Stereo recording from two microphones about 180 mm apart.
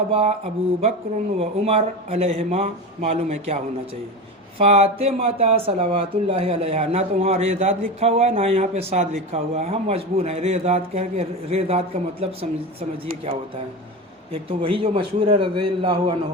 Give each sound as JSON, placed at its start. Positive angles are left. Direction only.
{"t": 0.1, "sound": "speech", "side_deg": -35}
{"t": 14.3, "sound": "a man's voice", "side_deg": -30}